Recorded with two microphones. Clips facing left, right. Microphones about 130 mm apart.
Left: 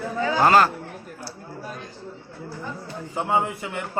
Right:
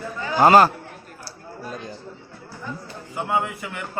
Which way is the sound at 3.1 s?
25° left (ahead or behind).